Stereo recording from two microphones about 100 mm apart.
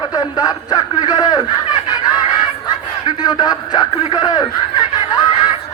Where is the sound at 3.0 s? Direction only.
45° left (ahead or behind).